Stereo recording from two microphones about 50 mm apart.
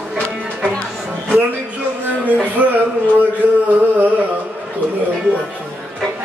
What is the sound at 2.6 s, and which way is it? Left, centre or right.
Music, right.